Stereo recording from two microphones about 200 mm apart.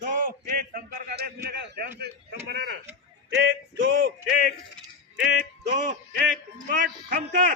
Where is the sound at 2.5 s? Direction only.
60° right (ahead or behind).